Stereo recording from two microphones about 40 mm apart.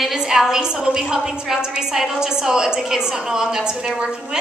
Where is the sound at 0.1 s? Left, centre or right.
Centre.